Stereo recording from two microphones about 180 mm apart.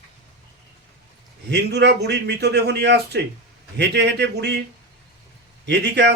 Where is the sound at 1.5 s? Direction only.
70° right (ahead or behind).